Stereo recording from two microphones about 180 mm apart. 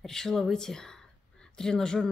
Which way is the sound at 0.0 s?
5° left (ahead or behind).